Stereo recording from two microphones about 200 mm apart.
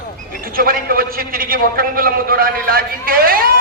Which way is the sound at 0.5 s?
45° right (ahead or behind).